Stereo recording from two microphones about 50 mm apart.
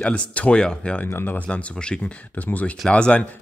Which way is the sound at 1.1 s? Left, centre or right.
Left.